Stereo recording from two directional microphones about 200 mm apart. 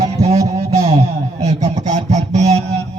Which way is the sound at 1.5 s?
35° right (ahead or behind).